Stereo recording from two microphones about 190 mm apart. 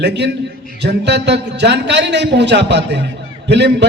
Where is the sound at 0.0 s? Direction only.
65° right (ahead or behind).